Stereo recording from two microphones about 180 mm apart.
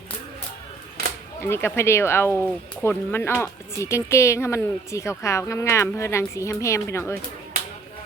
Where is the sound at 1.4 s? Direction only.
10° left (ahead or behind).